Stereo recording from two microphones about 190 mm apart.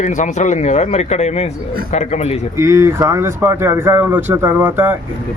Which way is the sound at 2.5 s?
15° right (ahead or behind).